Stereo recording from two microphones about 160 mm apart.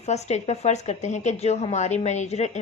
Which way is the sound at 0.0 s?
45° left (ahead or behind).